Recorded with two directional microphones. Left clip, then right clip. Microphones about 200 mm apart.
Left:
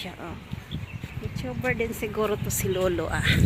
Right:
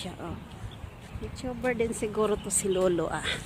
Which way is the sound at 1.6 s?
5° left (ahead or behind).